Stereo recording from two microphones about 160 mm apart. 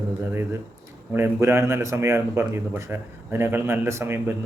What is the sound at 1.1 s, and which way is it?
Speech, 15° right (ahead or behind).